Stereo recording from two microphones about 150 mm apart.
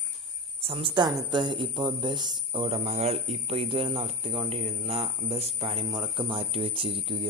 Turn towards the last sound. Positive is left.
turn(degrees=-35)  # may be behind; listen again after turning